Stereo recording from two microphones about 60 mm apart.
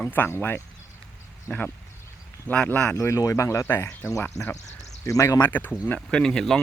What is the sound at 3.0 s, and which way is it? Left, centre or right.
Speech, left.